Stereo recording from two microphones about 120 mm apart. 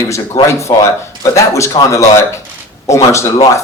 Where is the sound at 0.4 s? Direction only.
25° left (ahead or behind).